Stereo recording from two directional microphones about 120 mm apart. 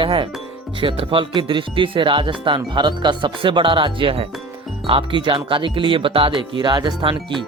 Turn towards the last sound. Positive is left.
turn(degrees=-45)  # may be behind; listen again after turning